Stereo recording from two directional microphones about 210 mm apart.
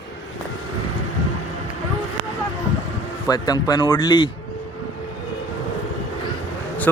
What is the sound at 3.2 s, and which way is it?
Speech, 20° left (ahead or behind).